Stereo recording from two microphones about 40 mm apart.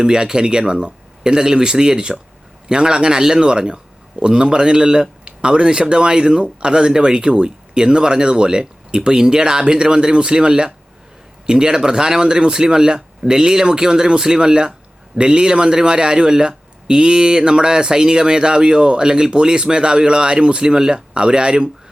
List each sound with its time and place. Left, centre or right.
0.0 s a man's voice: centre